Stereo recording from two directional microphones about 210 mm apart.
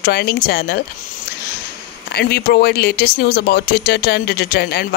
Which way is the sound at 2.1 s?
50° left (ahead or behind).